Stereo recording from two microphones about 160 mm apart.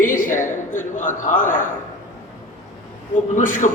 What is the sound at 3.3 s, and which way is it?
Speech, 55° left (ahead or behind).